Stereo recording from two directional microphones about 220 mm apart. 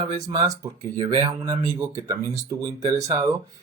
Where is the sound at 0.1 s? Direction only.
15° right (ahead or behind).